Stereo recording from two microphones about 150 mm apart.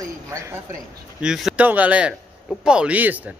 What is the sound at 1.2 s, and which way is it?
A man's voice, 5° right (ahead or behind).